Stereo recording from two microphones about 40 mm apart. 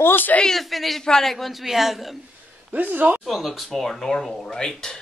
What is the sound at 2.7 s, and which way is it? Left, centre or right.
Speech, right.